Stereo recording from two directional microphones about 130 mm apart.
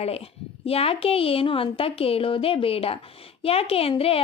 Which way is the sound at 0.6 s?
50° left (ahead or behind).